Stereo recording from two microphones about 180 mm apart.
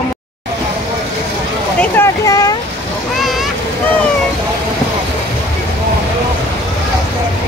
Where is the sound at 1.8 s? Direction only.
15° left (ahead or behind).